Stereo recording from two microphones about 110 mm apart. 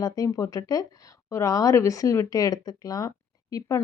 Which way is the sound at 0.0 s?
35° left (ahead or behind).